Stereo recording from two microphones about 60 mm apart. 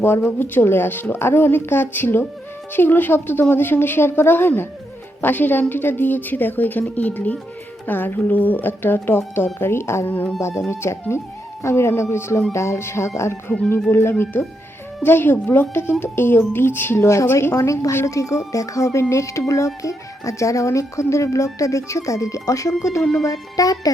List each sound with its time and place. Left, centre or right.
0.0 s speech: left
13.9 s speech: left
17.6 s speech: left
23.2 s speech: left